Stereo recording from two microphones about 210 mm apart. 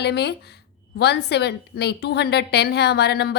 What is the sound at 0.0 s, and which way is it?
A woman's voice, 50° left (ahead or behind).